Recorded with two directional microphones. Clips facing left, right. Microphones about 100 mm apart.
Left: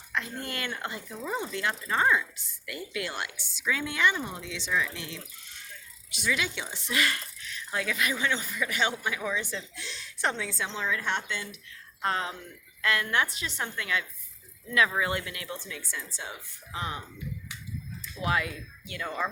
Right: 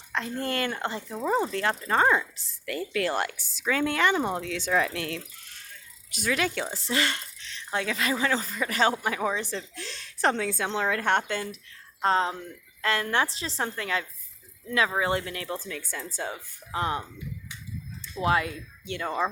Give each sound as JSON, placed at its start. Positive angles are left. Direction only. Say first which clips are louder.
{"t": 0.1, "sound": "a woman's voice", "louder": "right 5 dB", "side_deg": -35}
{"t": 6.1, "sound": "speech", "louder": "right 3 dB", "side_deg": -45}
{"t": 10.3, "sound": "a woman's voice", "louder": "right 6 dB", "side_deg": -60}
{"t": 12.0, "sound": "speech", "louder": "right 6 dB", "side_deg": -30}
{"t": 18.0, "sound": "speech", "louder": "right 4 dB", "side_deg": -35}